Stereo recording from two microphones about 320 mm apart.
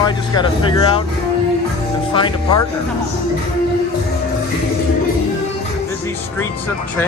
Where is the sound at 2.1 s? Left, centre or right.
Centre.